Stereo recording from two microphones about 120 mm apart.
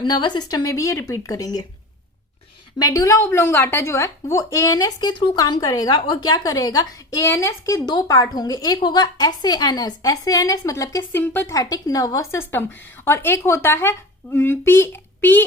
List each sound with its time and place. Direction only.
0.0 s a woman's voice: 40° left (ahead or behind)
2.7 s a woman's voice: 30° left (ahead or behind)
11.5 s a woman's voice: 30° left (ahead or behind)